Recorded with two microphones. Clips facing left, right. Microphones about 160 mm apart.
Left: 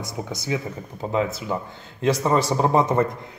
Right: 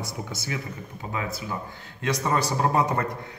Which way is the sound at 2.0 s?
25° left (ahead or behind).